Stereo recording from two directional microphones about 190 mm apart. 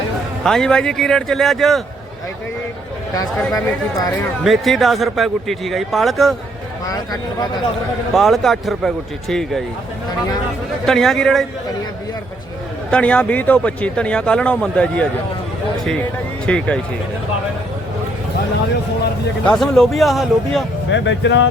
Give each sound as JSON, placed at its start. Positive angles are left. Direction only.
{"t": 0.4, "sound": "speech", "side_deg": 5}
{"t": 4.4, "sound": "speech", "side_deg": 0}
{"t": 8.1, "sound": "speech", "side_deg": 0}
{"t": 10.8, "sound": "speech", "side_deg": 0}
{"t": 12.9, "sound": "speech", "side_deg": 5}
{"t": 16.5, "sound": "speech", "side_deg": 5}
{"t": 19.5, "sound": "speech", "side_deg": 0}
{"t": 20.9, "sound": "speech", "side_deg": 70}